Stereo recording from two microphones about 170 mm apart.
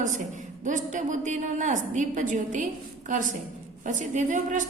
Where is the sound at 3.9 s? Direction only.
45° right (ahead or behind).